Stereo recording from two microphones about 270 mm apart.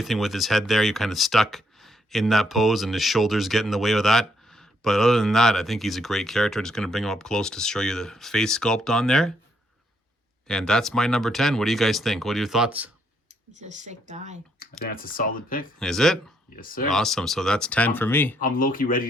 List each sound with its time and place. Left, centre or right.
0.0 s speech: centre
10.4 s speech: centre
13.6 s speech: right
14.6 s speech: left
15.8 s speech: centre
16.6 s speech: left
16.9 s speech: centre
18.3 s speech: left